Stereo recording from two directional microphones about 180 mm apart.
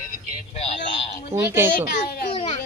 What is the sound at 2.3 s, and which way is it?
Music, 30° left (ahead or behind).